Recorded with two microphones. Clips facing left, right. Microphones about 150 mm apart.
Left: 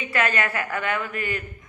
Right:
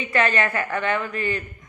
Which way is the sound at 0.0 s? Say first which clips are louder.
Right 3 dB; 30° right (ahead or behind).